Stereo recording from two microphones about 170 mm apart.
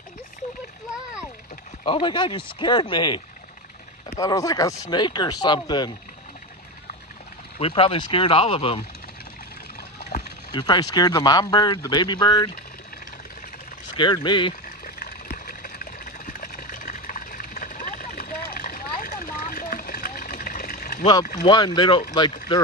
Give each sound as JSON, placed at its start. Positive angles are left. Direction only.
{"t": 1.8, "sound": "speech", "side_deg": 30}
{"t": 4.2, "sound": "speech", "side_deg": 20}
{"t": 7.6, "sound": "speech", "side_deg": 35}
{"t": 10.5, "sound": "speech", "side_deg": 25}
{"t": 13.9, "sound": "speech", "side_deg": 30}
{"t": 14.8, "sound": "a sound", "side_deg": 60}
{"t": 21.4, "sound": "speech", "side_deg": 25}